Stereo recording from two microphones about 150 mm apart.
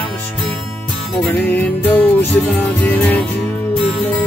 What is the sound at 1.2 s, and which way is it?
Music, 10° left (ahead or behind).